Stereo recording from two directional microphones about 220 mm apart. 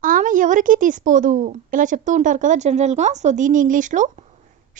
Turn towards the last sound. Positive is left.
turn(degrees=-35)  # may be behind; listen again after turning